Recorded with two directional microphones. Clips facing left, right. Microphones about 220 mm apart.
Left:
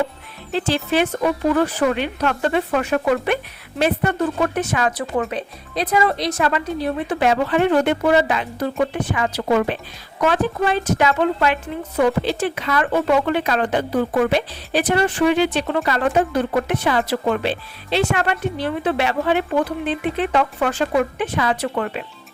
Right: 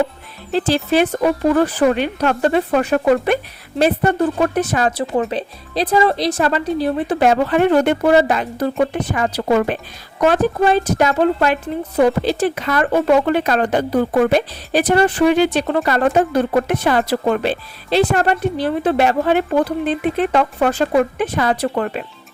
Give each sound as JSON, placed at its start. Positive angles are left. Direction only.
{"t": 0.5, "sound": "speech", "side_deg": -35}